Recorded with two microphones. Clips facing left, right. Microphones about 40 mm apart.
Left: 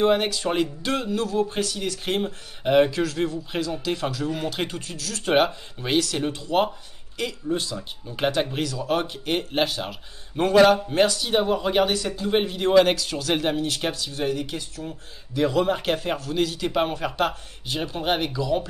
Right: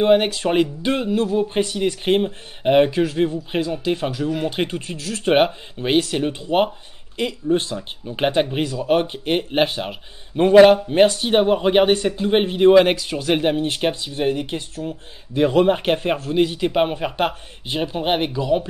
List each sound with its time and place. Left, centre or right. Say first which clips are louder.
0.0 s speech: right 5 dB; right